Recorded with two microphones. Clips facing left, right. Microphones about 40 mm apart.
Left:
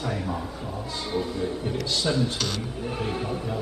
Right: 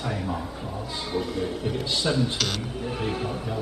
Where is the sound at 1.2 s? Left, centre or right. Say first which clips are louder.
Even; right.